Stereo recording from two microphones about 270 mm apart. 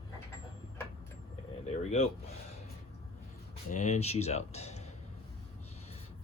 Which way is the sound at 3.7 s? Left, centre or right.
Left.